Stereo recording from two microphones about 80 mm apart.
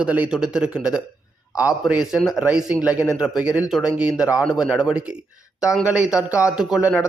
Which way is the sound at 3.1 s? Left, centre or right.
Centre.